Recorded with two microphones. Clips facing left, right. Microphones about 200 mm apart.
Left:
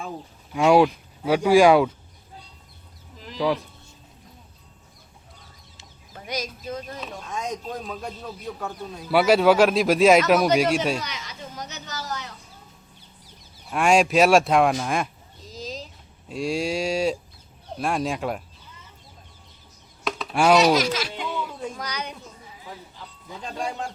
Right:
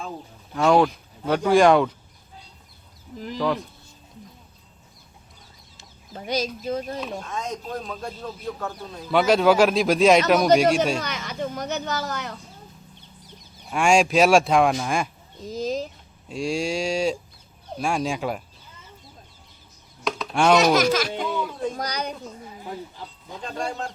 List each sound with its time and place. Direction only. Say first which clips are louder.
0.5 s speech: left 1 dB; 10° left (ahead or behind)
3.3 s speech: left 1 dB; 10° left (ahead or behind)
6.1 s speech: right 5 dB; 30° right (ahead or behind)
7.3 s a man's voice: even; 15° left (ahead or behind)
11.0 s speech: right 7 dB; 55° right (ahead or behind)
13.7 s a man's voice: even; centre (ahead or behind)
15.4 s a sound: right 9 dB; 55° right (ahead or behind)
16.3 s a man's voice: even; centre (ahead or behind)
20.1 s a sound: even; 5° left (ahead or behind)
20.7 s a child's voice: right 4 dB; 50° right (ahead or behind)
23.6 s speech: right 1 dB; 10° left (ahead or behind)